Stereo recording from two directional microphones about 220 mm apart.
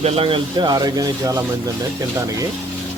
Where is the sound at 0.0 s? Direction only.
25° right (ahead or behind).